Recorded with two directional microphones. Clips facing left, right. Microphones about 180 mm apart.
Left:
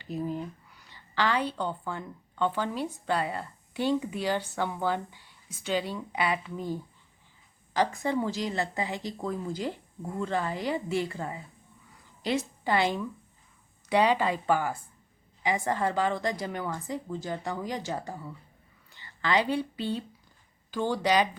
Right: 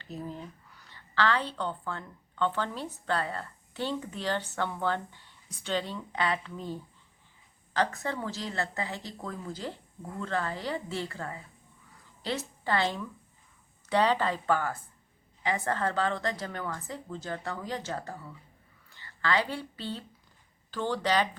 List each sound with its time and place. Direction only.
0.0 s a woman's voice: 15° left (ahead or behind)